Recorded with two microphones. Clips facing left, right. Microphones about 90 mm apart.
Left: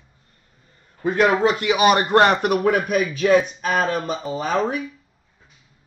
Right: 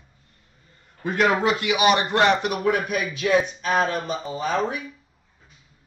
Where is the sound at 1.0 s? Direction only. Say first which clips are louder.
Left 3 dB; 30° left (ahead or behind).